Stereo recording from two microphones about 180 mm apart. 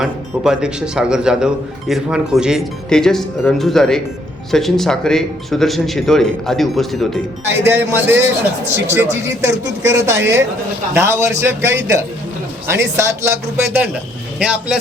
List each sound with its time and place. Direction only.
0.0 s speech: 5° right (ahead or behind)
7.4 s speech: 15° right (ahead or behind)